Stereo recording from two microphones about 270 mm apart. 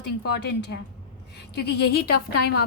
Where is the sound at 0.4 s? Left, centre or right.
Left.